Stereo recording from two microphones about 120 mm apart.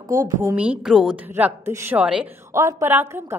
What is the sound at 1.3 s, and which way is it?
A woman's voice, 20° right (ahead or behind).